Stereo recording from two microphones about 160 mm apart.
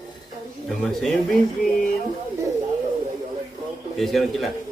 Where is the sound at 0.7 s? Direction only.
Centre (ahead or behind).